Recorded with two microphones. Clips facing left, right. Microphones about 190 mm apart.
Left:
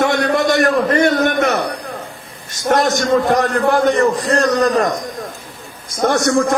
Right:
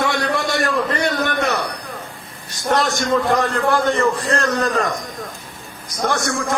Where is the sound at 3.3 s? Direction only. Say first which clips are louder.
Left 3 dB; 20° left (ahead or behind).